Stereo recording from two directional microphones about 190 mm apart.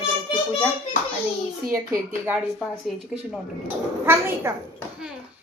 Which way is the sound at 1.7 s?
15° right (ahead or behind).